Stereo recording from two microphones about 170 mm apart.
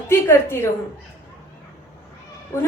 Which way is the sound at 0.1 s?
15° left (ahead or behind).